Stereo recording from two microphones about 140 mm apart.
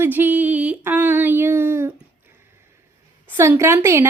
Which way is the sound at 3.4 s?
20° right (ahead or behind).